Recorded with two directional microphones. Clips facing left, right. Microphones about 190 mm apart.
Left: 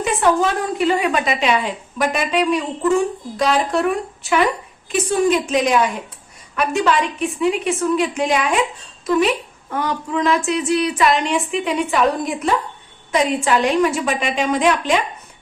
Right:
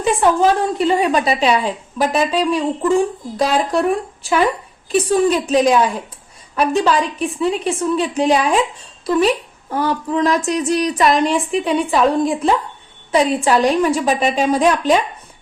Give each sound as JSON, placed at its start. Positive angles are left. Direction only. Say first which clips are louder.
{"t": 0.0, "sound": "a woman's voice", "louder": "right 3 dB", "side_deg": -30}
{"t": 4.9, "sound": "a woman's voice", "louder": "right 2 dB", "side_deg": -35}